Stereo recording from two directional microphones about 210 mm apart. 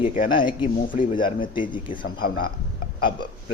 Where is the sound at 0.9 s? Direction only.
40° left (ahead or behind).